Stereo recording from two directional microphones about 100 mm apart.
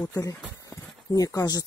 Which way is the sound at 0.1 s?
30° left (ahead or behind).